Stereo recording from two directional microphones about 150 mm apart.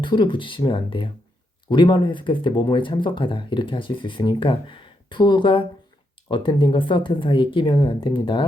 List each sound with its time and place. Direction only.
0.0 s speech: 30° left (ahead or behind)